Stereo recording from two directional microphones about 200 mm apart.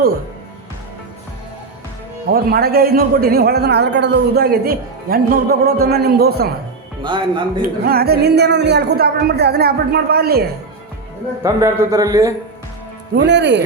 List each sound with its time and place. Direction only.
2.2 s a man's voice: 50° right (ahead or behind)
7.0 s speech: 25° right (ahead or behind)
7.9 s a man's voice: 50° right (ahead or behind)
11.4 s a man's voice: 15° right (ahead or behind)
13.1 s speech: 60° right (ahead or behind)